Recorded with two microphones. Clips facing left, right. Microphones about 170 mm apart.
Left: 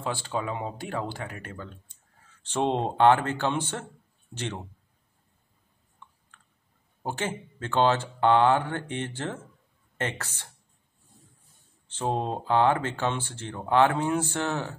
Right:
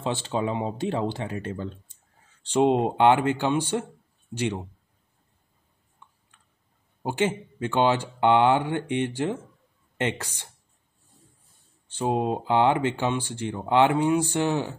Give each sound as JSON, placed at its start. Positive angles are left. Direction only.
{"t": 0.0, "sound": "speech", "side_deg": -20}
{"t": 2.4, "sound": "speech", "side_deg": -15}
{"t": 7.0, "sound": "speech", "side_deg": -15}
{"t": 11.9, "sound": "speech", "side_deg": -10}